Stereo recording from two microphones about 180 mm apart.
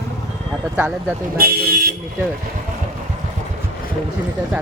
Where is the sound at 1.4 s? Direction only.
60° right (ahead or behind).